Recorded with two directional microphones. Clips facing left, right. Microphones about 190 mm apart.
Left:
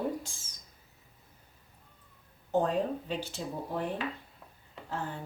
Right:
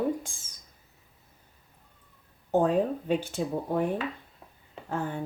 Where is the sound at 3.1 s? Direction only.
50° right (ahead or behind).